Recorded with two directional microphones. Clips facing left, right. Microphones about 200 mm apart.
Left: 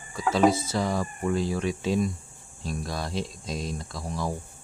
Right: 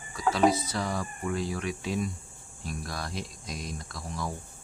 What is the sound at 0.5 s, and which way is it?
Speech, 25° left (ahead or behind).